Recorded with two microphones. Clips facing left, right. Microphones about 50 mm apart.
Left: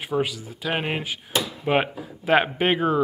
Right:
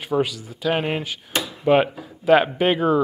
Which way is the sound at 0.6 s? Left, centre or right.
Left.